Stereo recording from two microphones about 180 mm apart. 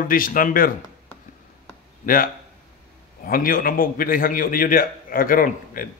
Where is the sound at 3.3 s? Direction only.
50° left (ahead or behind).